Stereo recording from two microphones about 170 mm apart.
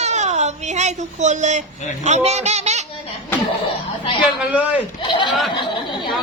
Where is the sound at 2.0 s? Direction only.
40° right (ahead or behind).